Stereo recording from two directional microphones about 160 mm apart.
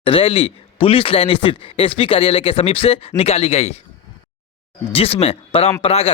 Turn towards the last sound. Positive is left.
turn(degrees=40)  # may be behind; listen again after turning